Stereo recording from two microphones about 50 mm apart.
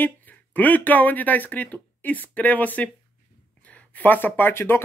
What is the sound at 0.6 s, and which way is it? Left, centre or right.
Speech, left.